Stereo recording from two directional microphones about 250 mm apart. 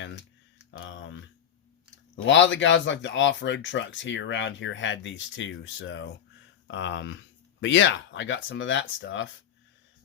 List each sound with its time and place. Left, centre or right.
0.7 s tick: left
2.2 s speech: left